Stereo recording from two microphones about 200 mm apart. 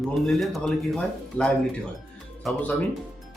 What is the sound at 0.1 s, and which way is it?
Speech, centre (ahead or behind).